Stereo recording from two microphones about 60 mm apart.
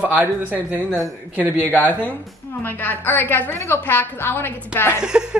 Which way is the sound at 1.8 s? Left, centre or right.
Left.